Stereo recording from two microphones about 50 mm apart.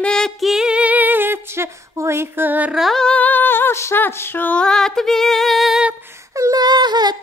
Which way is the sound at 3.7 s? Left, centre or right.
Left.